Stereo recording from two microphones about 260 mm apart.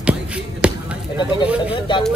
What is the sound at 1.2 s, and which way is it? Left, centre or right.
Speech, centre.